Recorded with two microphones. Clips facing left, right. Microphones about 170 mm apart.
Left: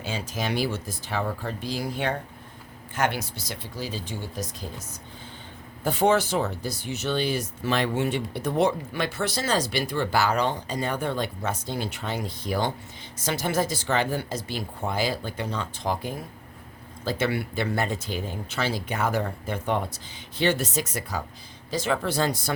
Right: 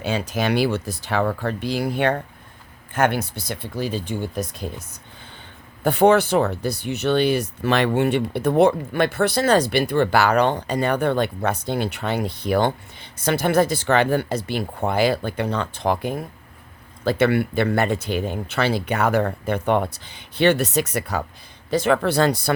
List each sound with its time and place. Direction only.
0.0 s speech: 65° right (ahead or behind)
5.8 s speech: 60° right (ahead or behind)